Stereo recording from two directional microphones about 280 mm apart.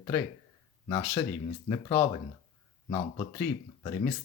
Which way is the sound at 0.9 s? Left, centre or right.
Centre.